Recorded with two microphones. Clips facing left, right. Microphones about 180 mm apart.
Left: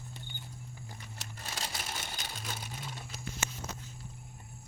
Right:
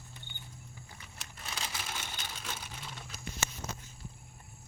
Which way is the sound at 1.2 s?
35° left (ahead or behind).